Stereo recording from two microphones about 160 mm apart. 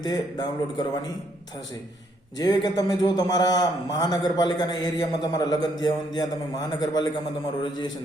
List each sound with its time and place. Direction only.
0.0 s a man's voice: 25° left (ahead or behind)
2.4 s a man's voice: 25° left (ahead or behind)